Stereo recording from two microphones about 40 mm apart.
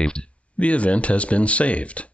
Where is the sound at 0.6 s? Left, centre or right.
Left.